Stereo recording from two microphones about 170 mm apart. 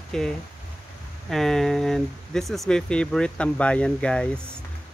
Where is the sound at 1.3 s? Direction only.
Centre (ahead or behind).